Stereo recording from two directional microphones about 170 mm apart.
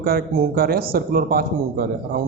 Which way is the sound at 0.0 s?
60° right (ahead or behind).